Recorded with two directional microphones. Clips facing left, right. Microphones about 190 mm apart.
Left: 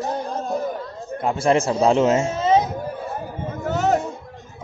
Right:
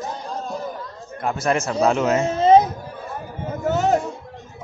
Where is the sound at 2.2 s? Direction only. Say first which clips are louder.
Right 4 dB; 35° right (ahead or behind).